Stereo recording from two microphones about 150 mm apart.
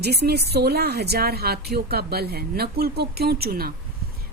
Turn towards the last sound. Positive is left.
turn(degrees=-90)